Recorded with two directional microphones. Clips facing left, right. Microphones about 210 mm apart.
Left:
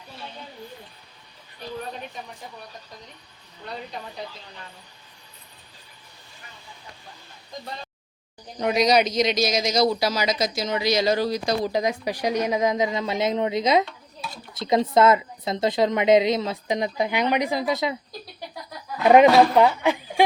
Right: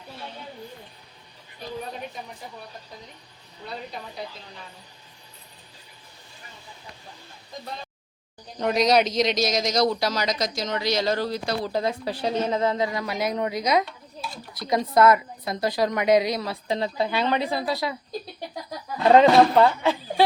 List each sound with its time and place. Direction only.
8.5 s a woman's voice: centre (ahead or behind); by 17.9 s 20° left (ahead or behind)
19.0 s speech: 15° left (ahead or behind)